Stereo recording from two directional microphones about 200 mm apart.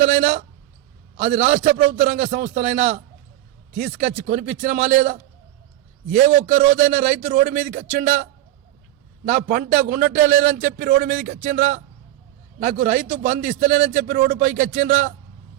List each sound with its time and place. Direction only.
1.1 s a man's voice: 35° right (ahead or behind)
9.3 s a man's voice: 45° right (ahead or behind)